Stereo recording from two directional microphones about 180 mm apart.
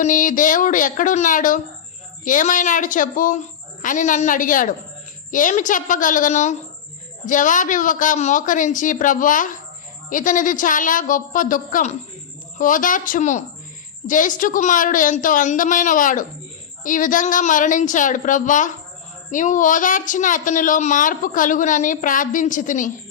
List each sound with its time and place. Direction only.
0.0 s speech: 45° left (ahead or behind)